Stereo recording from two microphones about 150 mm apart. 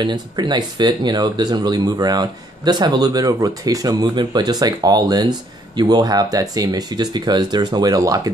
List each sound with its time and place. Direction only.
0.0 s speech: 30° right (ahead or behind)